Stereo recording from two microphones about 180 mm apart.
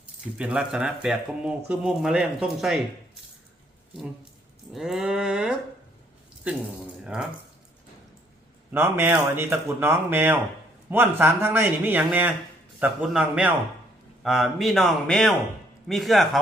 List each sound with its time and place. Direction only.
0.3 s speech: 5° right (ahead or behind)
4.7 s speech: centre (ahead or behind)
7.0 s speech: 5° right (ahead or behind)
8.7 s a man's voice: 10° right (ahead or behind)